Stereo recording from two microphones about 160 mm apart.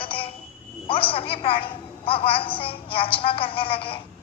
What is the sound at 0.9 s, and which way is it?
A woman's voice, 35° left (ahead or behind).